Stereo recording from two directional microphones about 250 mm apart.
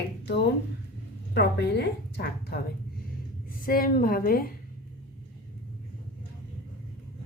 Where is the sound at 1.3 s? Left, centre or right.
Left.